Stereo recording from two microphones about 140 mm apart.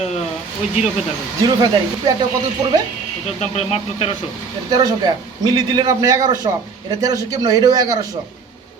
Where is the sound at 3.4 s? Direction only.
50° left (ahead or behind).